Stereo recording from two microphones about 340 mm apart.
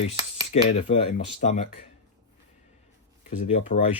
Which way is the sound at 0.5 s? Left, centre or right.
Centre.